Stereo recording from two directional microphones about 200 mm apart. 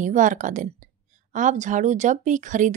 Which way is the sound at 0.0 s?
40° right (ahead or behind).